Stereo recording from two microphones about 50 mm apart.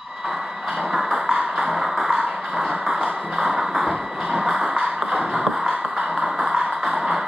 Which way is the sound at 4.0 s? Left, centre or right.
Centre.